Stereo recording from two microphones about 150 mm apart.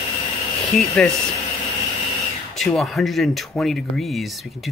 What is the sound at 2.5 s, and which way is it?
Speech, centre (ahead or behind).